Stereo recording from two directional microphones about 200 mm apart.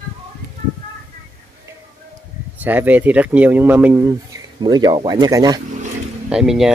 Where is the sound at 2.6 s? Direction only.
10° right (ahead or behind).